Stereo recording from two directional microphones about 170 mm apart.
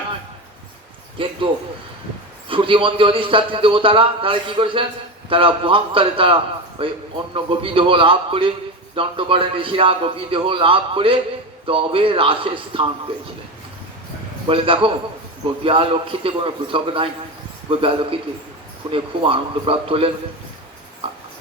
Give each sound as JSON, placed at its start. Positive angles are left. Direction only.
{"t": 1.2, "sound": "speech", "side_deg": -30}
{"t": 2.5, "sound": "a man's voice", "side_deg": -30}
{"t": 14.4, "sound": "a man's voice", "side_deg": -30}